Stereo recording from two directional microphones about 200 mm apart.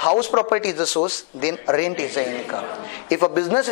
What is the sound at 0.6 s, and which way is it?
A man's voice, 10° left (ahead or behind).